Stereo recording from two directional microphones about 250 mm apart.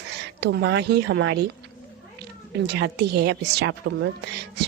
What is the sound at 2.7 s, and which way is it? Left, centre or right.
A woman's voice, right.